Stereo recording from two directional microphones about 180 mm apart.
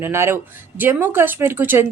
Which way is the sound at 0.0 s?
15° right (ahead or behind).